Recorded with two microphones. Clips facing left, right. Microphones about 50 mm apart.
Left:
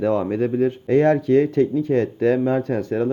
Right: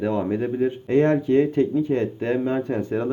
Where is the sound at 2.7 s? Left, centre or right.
Centre.